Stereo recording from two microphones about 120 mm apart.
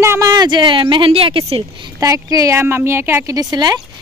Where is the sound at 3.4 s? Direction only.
35° right (ahead or behind).